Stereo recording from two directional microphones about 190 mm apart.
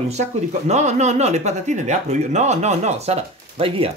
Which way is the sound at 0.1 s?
35° right (ahead or behind).